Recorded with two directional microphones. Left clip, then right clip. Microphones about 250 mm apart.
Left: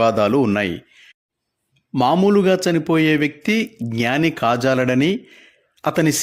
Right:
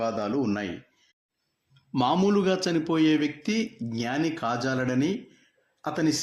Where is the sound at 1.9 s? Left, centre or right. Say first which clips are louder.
Left 8 dB; left.